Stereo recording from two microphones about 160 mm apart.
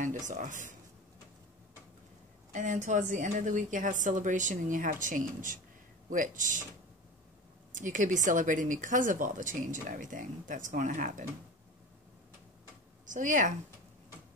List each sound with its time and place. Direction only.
0.0 s speech: 50° right (ahead or behind)
2.5 s speech: 50° right (ahead or behind)
7.7 s speech: 55° right (ahead or behind)
13.0 s speech: 55° right (ahead or behind)